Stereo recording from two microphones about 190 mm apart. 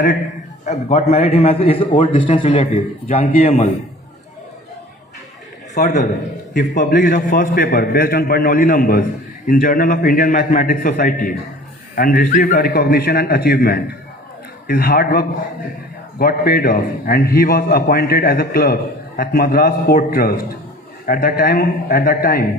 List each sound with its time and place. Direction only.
0.6 s a man's voice: 35° left (ahead or behind)
5.7 s a man's voice: 40° left (ahead or behind)